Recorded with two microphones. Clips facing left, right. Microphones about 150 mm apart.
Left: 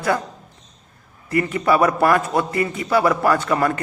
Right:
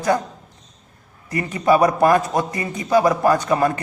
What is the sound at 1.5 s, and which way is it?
A man's voice, 20° right (ahead or behind).